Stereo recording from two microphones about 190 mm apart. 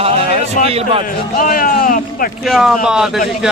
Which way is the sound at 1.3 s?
45° left (ahead or behind).